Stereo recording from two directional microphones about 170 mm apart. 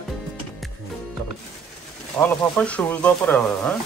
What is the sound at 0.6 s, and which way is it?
Music, centre (ahead or behind).